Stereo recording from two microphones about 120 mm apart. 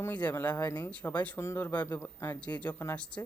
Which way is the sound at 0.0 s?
10° left (ahead or behind).